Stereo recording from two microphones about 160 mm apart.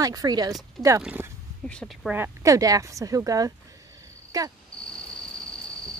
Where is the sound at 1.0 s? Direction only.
10° right (ahead or behind).